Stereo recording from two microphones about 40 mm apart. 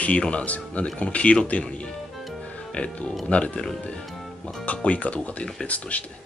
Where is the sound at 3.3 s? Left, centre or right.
Left.